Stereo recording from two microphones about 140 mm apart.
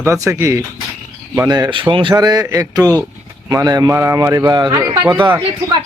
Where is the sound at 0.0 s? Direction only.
20° right (ahead or behind).